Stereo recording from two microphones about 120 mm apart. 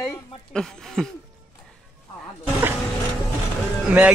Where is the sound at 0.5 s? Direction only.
5° left (ahead or behind).